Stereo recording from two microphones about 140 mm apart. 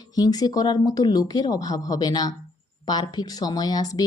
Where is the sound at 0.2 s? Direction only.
25° left (ahead or behind).